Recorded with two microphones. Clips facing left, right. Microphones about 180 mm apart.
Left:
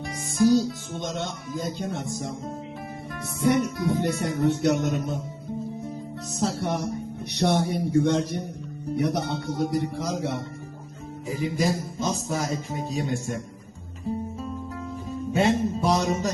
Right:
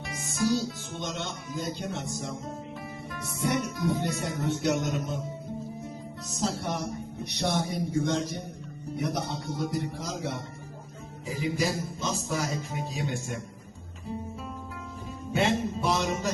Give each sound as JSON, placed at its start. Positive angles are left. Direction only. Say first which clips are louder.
{"t": 0.2, "sound": "music", "louder": "left 7 dB", "side_deg": 45}
{"t": 6.6, "sound": "music", "louder": "left 5 dB", "side_deg": 60}
{"t": 11.3, "sound": "music", "louder": "left 3 dB", "side_deg": 50}
{"t": 15.3, "sound": "music", "louder": "left 4 dB", "side_deg": 40}